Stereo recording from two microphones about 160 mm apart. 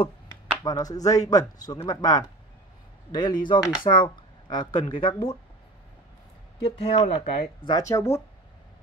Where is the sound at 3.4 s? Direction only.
30° left (ahead or behind).